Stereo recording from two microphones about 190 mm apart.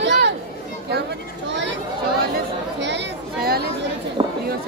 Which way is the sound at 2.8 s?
65° right (ahead or behind).